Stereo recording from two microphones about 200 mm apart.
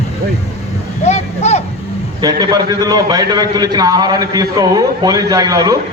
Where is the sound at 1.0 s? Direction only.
35° left (ahead or behind).